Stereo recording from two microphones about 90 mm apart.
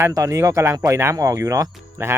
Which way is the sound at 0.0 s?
35° right (ahead or behind).